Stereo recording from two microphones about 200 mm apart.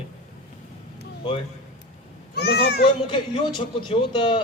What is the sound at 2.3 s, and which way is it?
Speech, 55° left (ahead or behind).